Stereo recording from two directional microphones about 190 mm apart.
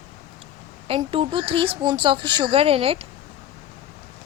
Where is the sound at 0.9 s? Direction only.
30° right (ahead or behind).